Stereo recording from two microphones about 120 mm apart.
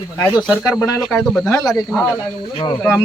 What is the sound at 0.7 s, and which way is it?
Speech, 25° left (ahead or behind).